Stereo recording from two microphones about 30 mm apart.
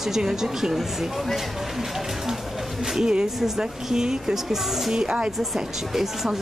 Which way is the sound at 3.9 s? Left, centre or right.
Right.